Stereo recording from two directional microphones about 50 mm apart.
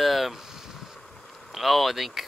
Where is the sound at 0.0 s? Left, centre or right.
Centre.